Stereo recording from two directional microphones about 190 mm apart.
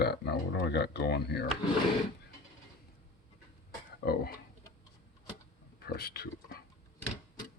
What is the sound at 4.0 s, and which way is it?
Speech, 55° left (ahead or behind).